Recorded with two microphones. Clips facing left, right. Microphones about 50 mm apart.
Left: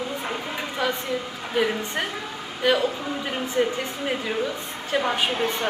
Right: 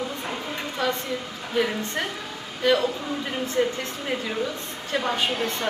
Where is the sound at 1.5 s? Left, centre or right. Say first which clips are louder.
Left 1 dB; centre.